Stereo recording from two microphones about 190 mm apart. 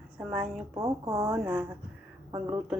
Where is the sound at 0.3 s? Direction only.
5° right (ahead or behind).